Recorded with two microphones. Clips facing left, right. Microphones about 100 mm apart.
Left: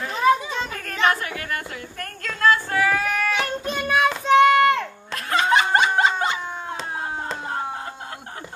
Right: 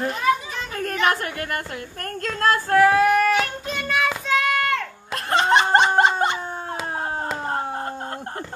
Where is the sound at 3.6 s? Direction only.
20° left (ahead or behind).